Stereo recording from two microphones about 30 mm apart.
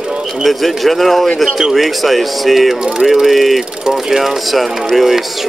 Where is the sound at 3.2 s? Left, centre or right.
Centre.